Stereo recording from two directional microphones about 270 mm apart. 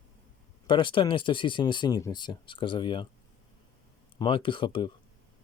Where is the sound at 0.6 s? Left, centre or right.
Centre.